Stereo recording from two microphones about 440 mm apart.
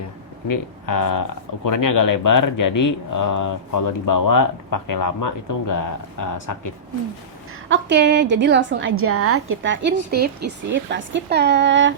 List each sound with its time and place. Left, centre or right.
0.4 s speech: left
7.7 s a woman's voice: right